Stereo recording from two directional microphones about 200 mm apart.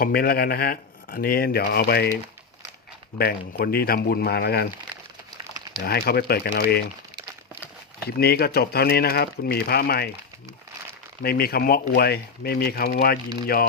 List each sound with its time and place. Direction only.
0.0 s speech: 50° left (ahead or behind)
3.2 s speech: 50° left (ahead or behind)
5.8 s speech: 50° left (ahead or behind)
8.0 s speech: 50° left (ahead or behind)
11.2 s speech: 50° left (ahead or behind)